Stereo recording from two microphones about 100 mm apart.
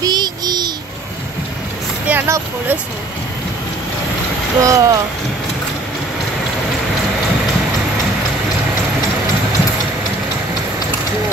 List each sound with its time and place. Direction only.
0.0 s child singing: 45° right (ahead or behind)
2.0 s vehicle: 25° right (ahead or behind)
4.6 s speech: 35° right (ahead or behind)